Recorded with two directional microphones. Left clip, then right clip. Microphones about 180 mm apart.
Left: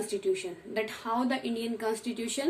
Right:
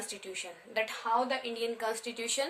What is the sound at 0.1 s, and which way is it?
A woman's voice, 20° right (ahead or behind).